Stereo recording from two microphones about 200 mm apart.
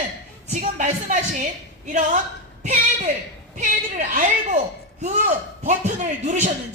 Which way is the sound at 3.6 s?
40° right (ahead or behind).